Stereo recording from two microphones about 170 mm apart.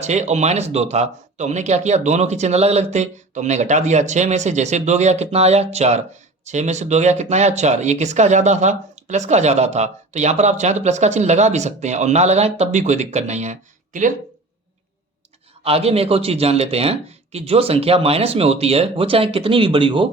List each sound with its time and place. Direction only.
0.0 s speech: 40° right (ahead or behind)
15.6 s speech: 35° right (ahead or behind)